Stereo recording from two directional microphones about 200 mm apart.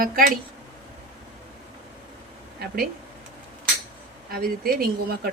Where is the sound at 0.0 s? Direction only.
45° right (ahead or behind).